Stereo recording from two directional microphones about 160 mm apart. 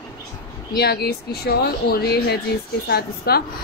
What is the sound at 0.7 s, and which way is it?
A woman's voice, 90° left.